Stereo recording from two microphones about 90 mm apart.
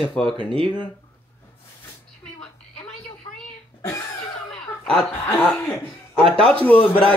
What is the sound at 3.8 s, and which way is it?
Cough, 30° left (ahead or behind).